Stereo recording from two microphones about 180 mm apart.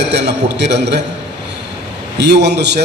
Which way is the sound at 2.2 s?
70° right (ahead or behind).